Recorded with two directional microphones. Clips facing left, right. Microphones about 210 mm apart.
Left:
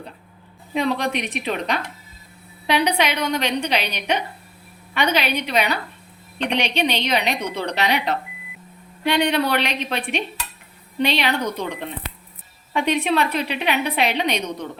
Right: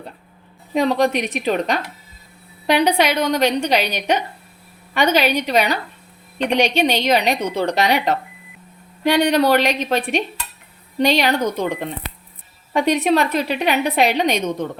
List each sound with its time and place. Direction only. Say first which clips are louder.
0.7 s a woman's voice: right 5 dB; 40° right (ahead or behind)
12.7 s a woman's voice: right 4 dB; 40° right (ahead or behind)